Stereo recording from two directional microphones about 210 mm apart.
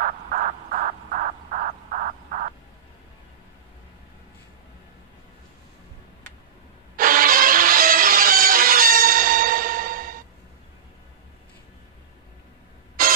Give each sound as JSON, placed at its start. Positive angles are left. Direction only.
{"t": 0.0, "sound": "crow", "side_deg": -40}
{"t": 7.0, "sound": "music", "side_deg": -40}
{"t": 13.0, "sound": "music", "side_deg": -45}